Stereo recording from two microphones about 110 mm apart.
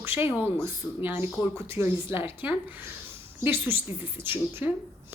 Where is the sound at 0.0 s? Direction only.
20° right (ahead or behind).